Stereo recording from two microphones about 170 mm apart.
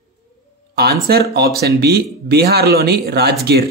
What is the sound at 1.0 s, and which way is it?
Speech, 65° right (ahead or behind).